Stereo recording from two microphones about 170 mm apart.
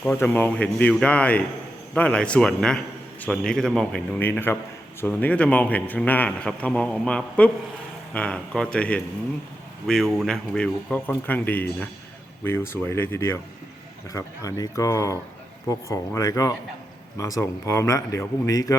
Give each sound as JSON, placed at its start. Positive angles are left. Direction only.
{"t": 0.0, "sound": "a man's voice", "side_deg": 10}